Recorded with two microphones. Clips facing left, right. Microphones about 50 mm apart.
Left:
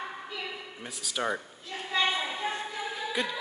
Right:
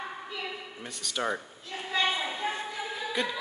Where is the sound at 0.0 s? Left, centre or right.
Centre.